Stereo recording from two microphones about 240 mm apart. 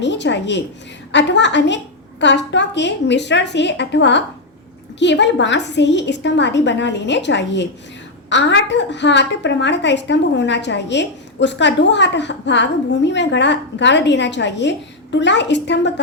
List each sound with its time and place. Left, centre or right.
0.0 s a woman's voice: left